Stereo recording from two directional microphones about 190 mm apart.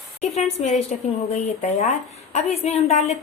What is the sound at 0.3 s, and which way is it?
Speech, 35° left (ahead or behind).